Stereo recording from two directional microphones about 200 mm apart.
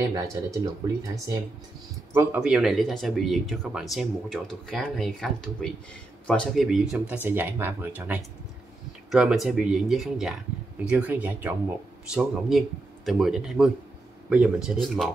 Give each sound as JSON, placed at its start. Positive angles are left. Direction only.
{"t": 0.1, "sound": "speech", "side_deg": -15}
{"t": 2.1, "sound": "speech", "side_deg": -5}